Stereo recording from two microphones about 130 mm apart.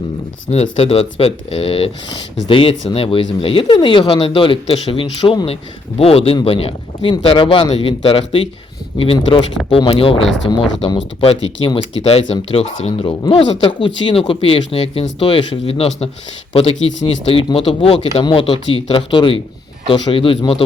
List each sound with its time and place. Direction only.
0.8 s speech: 50° left (ahead or behind)
9.6 s speech: 40° left (ahead or behind)
13.2 s speech: 40° left (ahead or behind)